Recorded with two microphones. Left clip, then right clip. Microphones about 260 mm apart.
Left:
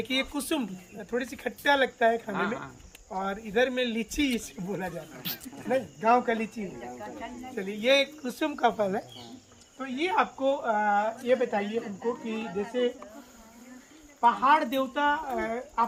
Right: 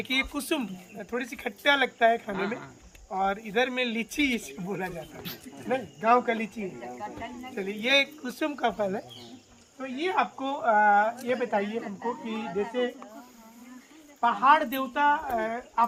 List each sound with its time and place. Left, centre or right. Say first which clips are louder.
0.0 s speech: right 1 dB; centre
2.3 s speech: left 1 dB; centre
3.1 s speech: right 4 dB; centre
10.2 s speech: left 3 dB; centre
12.2 s speech: even; right
14.2 s speech: right 1 dB; centre